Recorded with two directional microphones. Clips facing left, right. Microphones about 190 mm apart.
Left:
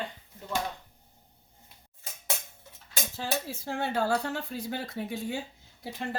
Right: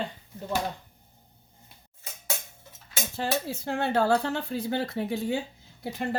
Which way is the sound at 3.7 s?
65° right (ahead or behind).